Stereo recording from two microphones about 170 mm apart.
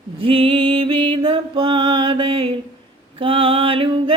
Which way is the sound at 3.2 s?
30° right (ahead or behind).